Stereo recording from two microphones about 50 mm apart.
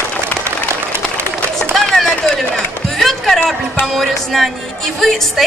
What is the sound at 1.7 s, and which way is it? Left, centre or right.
Run, centre.